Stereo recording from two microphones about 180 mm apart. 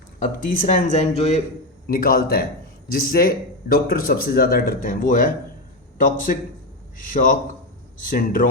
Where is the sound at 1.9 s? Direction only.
55° left (ahead or behind).